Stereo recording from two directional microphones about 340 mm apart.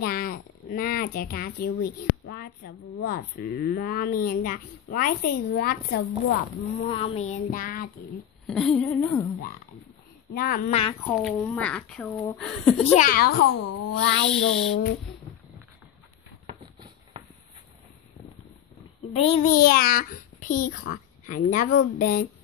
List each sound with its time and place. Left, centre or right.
0.0 s a child's voice: left
6.8 s a child's voice: centre
8.5 s speech: centre
10.3 s a child's voice: left
11.1 s speech: centre
12.9 s a child's voice: left
13.3 s speech: left
14.3 s speech: centre
19.1 s a child's voice: centre